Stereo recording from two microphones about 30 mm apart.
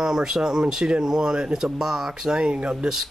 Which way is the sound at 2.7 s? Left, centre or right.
Centre.